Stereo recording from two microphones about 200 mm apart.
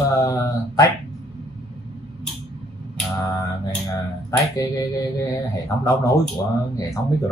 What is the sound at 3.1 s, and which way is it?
Mantra, 15° left (ahead or behind).